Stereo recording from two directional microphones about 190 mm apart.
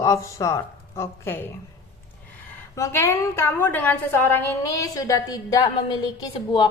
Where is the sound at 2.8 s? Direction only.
15° left (ahead or behind).